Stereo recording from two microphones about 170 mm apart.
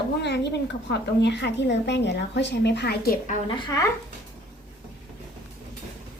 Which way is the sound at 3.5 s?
25° left (ahead or behind).